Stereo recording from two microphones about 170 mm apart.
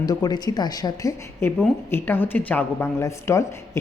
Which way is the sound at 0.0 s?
25° left (ahead or behind).